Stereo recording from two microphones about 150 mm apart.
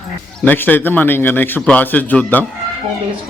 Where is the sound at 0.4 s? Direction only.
10° left (ahead or behind).